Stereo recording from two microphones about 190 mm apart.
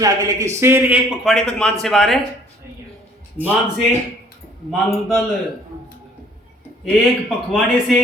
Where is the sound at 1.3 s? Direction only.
5° left (ahead or behind).